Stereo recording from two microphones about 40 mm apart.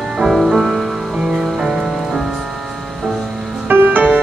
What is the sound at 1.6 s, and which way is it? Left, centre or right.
Rain on surface, centre.